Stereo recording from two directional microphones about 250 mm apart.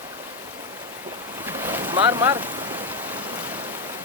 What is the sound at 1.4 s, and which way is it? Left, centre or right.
Boat, centre.